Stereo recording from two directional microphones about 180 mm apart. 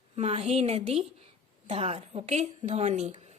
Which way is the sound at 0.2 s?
35° right (ahead or behind).